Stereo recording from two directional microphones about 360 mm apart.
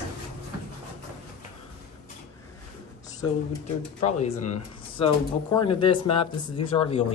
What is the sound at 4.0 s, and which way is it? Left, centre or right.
Speech, centre.